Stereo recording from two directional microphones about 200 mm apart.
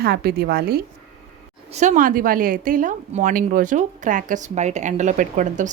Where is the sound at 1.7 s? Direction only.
40° right (ahead or behind).